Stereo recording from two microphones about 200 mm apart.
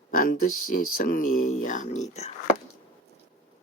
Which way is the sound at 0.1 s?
45° left (ahead or behind).